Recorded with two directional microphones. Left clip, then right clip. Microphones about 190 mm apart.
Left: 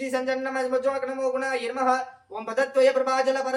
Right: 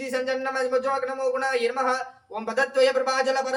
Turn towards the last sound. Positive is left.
turn(degrees=-20)  # may be behind; listen again after turning